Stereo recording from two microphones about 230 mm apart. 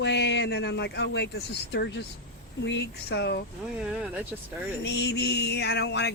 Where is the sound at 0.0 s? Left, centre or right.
Left.